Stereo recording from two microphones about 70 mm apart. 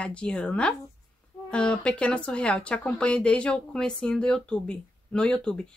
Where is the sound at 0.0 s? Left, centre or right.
Centre.